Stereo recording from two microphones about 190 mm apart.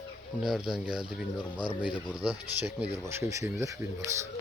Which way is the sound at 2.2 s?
10° right (ahead or behind).